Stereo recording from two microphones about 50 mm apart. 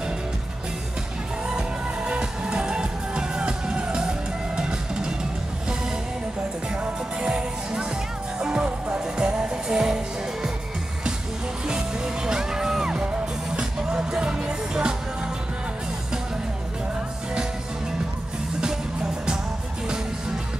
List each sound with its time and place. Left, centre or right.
1.5 s music: centre
6.7 s music: centre
11.6 s music: centre